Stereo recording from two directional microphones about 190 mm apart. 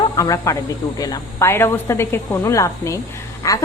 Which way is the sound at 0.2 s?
15° left (ahead or behind).